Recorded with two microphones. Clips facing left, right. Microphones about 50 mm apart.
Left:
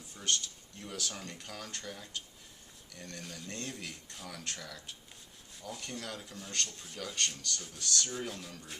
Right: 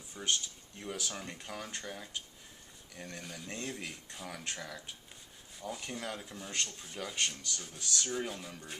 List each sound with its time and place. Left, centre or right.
0.1 s speech: centre
6.7 s speech: centre
6.9 s speech: centre